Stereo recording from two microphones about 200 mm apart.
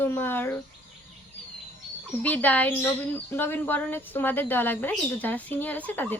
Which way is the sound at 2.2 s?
10° left (ahead or behind).